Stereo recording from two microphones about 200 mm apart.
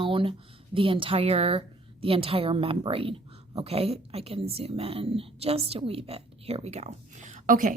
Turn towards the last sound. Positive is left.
turn(degrees=-40)  # may be behind; listen again after turning